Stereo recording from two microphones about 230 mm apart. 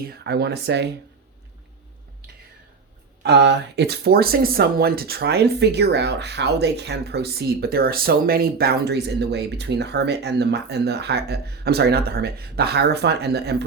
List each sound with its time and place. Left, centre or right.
0.0 s speech: right
3.2 s speech: right